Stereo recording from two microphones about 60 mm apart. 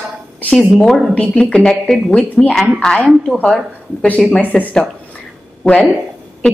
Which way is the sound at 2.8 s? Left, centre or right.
Centre.